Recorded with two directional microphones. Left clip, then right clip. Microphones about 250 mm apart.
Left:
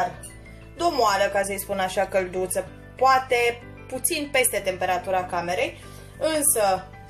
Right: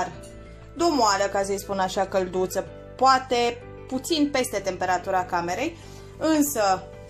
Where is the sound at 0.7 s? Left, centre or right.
Right.